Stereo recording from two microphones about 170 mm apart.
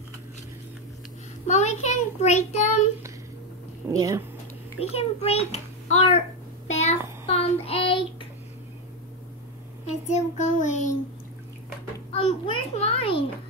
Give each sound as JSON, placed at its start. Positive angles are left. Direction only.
{"t": 1.5, "sound": "a child's voice", "side_deg": 40}
{"t": 3.9, "sound": "speech", "side_deg": -20}
{"t": 4.7, "sound": "a child's voice", "side_deg": 35}
{"t": 6.7, "sound": "child singing", "side_deg": 40}
{"t": 9.8, "sound": "child singing", "side_deg": 45}
{"t": 12.1, "sound": "a child's voice", "side_deg": 35}